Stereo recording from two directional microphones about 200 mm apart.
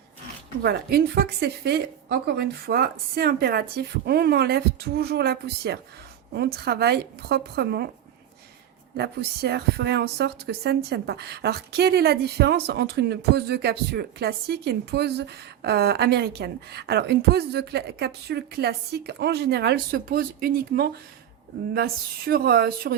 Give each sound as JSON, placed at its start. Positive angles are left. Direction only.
{"t": 0.6, "sound": "a woman's voice", "side_deg": -50}
{"t": 9.0, "sound": "a woman's voice", "side_deg": -55}